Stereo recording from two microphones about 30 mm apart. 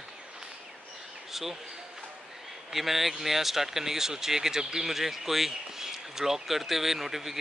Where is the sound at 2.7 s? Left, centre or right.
Centre.